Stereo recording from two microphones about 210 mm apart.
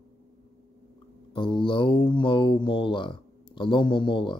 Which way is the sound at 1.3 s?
25° left (ahead or behind).